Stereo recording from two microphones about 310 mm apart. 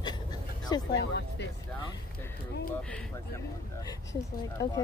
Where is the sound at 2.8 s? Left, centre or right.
Centre.